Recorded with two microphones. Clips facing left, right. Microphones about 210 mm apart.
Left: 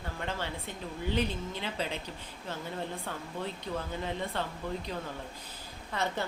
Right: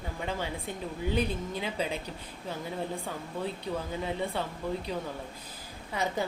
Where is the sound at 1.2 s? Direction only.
10° right (ahead or behind).